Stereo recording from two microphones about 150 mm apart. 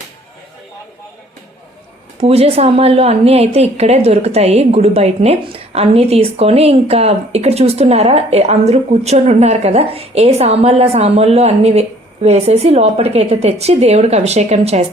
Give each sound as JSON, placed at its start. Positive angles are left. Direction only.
{"t": 2.2, "sound": "a woman's voice", "side_deg": -40}